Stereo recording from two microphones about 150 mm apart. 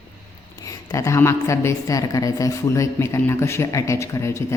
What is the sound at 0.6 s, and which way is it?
Speech, 20° left (ahead or behind).